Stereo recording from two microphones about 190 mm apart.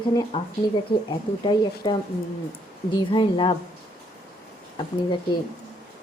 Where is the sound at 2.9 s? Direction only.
25° left (ahead or behind).